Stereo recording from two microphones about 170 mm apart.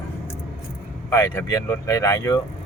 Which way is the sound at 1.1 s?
20° left (ahead or behind).